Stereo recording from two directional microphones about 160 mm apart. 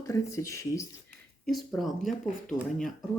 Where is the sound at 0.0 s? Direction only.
20° left (ahead or behind).